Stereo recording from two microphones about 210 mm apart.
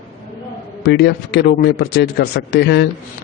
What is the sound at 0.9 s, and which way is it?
Speech, 50° left (ahead or behind).